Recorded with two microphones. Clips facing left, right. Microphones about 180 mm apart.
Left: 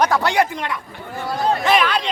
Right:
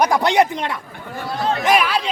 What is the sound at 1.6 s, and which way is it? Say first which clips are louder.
Speech: right 3 dB; 10° right (ahead or behind).